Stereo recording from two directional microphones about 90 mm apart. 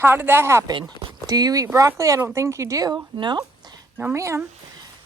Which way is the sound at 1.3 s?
45° right (ahead or behind).